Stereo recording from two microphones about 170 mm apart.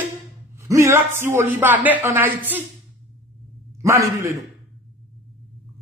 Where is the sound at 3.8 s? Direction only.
15° right (ahead or behind).